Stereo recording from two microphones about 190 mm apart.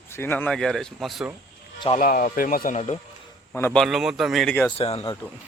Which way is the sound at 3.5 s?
10° left (ahead or behind).